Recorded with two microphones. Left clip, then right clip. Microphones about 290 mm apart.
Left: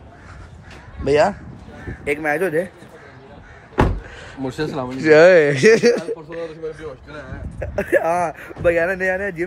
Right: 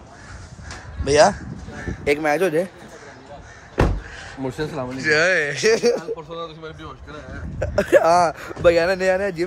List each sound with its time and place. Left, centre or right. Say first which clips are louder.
1.0 s speech: right 1 dB; centre
2.0 s speech: right 1 dB; centre
3.7 s crow: left 2 dB; centre
4.4 s speech: left 2 dB; centre
4.9 s speech: left 8 dB; centre; by 6.0 s left
7.7 s speech: right 3 dB; centre